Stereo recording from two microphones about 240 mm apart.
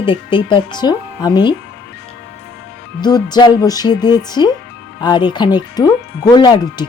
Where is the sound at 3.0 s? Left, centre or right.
Centre.